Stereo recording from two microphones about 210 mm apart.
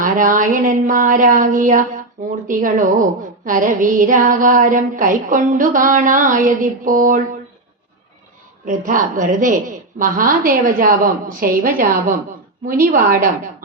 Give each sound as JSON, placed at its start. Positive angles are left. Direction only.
{"t": 0.0, "sound": "a sound", "side_deg": -40}
{"t": 0.5, "sound": "a woman's voice", "side_deg": -40}
{"t": 8.6, "sound": "a woman's voice", "side_deg": -40}